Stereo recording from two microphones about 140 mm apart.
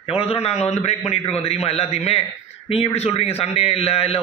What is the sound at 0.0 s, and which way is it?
A man's voice, 45° left (ahead or behind).